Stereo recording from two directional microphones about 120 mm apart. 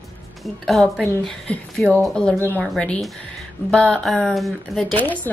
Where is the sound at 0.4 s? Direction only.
5° left (ahead or behind).